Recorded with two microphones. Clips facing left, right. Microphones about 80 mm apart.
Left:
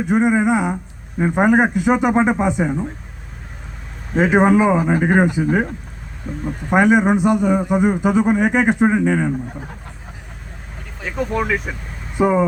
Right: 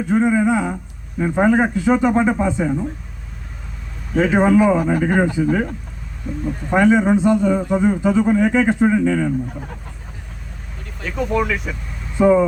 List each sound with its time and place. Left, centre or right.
0.1 s speech: centre
4.2 s a man's voice: centre
11.1 s speech: centre
11.7 s vehicle: centre